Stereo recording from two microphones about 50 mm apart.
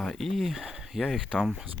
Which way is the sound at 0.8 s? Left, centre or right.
Centre.